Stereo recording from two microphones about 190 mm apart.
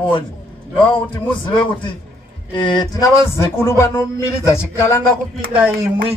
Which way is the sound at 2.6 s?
25° left (ahead or behind).